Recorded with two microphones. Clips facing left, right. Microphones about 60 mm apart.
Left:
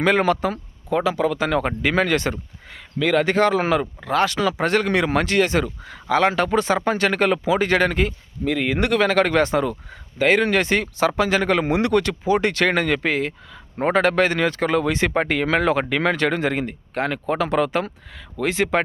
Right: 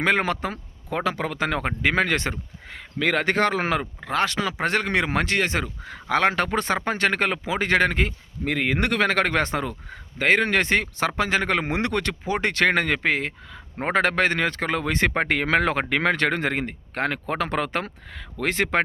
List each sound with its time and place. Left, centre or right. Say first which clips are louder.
0.0 s a man's voice: left 4 dB; right
0.9 s a man's voice: left 6 dB; right